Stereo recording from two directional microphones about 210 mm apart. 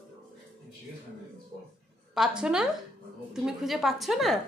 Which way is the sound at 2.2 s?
Centre (ahead or behind).